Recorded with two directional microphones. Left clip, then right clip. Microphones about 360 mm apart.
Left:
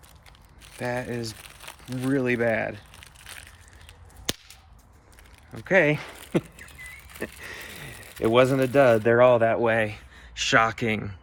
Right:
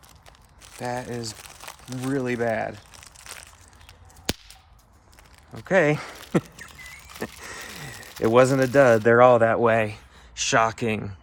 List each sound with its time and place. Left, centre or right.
0.6 s crumpling: centre
5.6 s speech: centre